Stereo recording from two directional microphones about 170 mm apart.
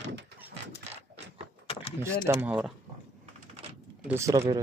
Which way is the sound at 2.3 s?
10° right (ahead or behind).